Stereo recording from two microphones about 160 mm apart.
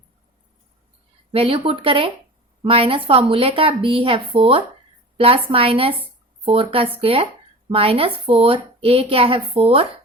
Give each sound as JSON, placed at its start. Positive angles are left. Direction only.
{"t": 1.3, "sound": "a woman's voice", "side_deg": -35}